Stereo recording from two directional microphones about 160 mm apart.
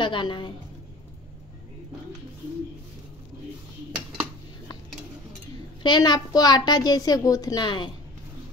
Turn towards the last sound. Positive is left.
turn(degrees=30)  # may be behind; listen again after turning